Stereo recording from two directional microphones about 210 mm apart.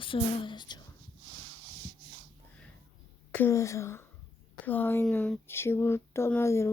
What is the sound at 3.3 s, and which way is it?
Speech, 10° left (ahead or behind).